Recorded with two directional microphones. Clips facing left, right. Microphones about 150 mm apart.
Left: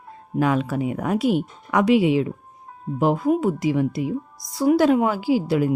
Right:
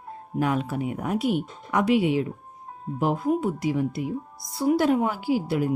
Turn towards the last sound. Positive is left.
turn(degrees=90)